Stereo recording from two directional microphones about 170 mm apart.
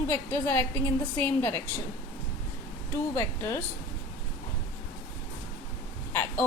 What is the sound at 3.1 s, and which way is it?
Speech, 15° left (ahead or behind).